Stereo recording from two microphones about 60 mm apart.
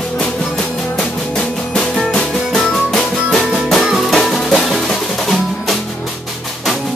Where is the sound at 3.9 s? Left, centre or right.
Centre.